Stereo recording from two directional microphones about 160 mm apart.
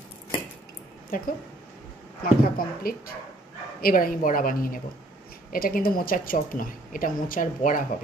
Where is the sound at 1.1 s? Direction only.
60° left (ahead or behind).